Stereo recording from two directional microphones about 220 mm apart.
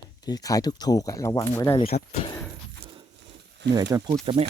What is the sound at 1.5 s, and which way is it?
Speech, 10° left (ahead or behind).